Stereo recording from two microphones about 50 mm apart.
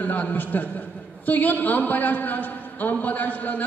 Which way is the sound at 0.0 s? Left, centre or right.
Left.